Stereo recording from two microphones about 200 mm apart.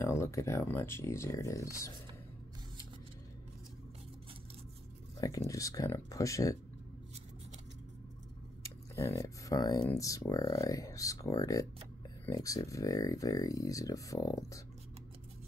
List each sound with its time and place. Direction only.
0.0 s speech: 15° left (ahead or behind)
5.2 s speech: 15° left (ahead or behind)
8.9 s speech: 15° left (ahead or behind)